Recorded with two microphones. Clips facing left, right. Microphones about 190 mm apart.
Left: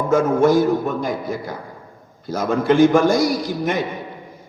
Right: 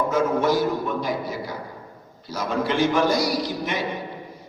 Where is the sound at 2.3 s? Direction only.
50° left (ahead or behind).